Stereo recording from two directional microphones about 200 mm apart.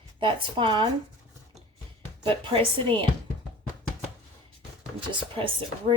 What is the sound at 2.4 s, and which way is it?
Speech, 25° right (ahead or behind).